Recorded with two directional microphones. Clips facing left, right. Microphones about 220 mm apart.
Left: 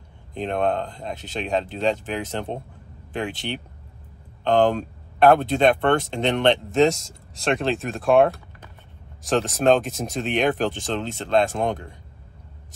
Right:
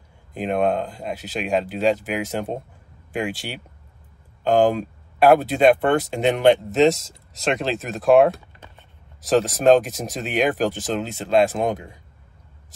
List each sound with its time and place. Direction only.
0.3 s speech: 5° right (ahead or behind)
9.3 s speech: 5° right (ahead or behind)